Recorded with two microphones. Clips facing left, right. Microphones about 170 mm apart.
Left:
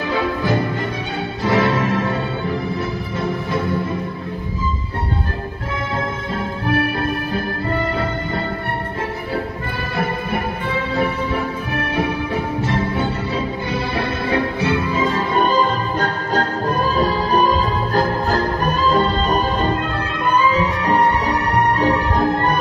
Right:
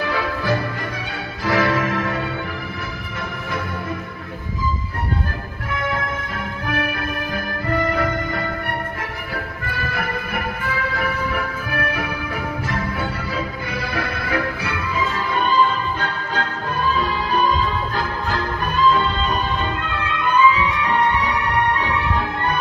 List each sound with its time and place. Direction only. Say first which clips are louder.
0.0 s music: left 3 dB; 25° left (ahead or behind)
6.7 s music: left 5 dB; 30° left (ahead or behind)
9.3 s music: left 5 dB; 25° left (ahead or behind)
15.3 s music: even; 40° left (ahead or behind)